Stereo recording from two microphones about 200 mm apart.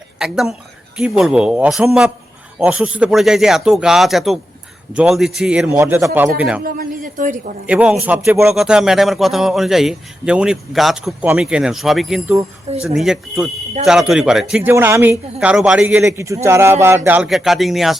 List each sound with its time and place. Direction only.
0.2 s a man's voice: 5° right (ahead or behind)
6.7 s a woman's voice: 45° right (ahead or behind)
7.7 s a man's voice: 5° right (ahead or behind)